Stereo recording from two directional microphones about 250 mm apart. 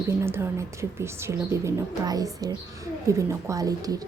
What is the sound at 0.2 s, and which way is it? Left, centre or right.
Speech, centre.